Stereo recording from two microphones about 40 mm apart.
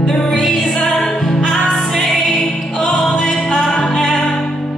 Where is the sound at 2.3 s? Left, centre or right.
Centre.